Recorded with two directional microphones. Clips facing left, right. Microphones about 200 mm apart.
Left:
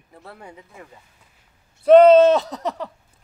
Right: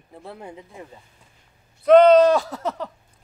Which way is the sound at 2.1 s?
25° left (ahead or behind).